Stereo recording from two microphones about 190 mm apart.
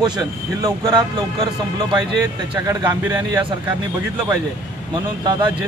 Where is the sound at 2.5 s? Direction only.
15° right (ahead or behind).